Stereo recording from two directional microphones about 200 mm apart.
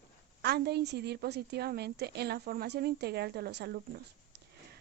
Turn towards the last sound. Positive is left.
turn(degrees=-55)  # may be behind; listen again after turning